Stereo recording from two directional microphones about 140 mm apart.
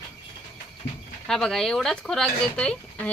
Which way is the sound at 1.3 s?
5° left (ahead or behind).